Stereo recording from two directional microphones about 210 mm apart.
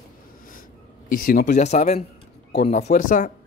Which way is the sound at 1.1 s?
45° left (ahead or behind).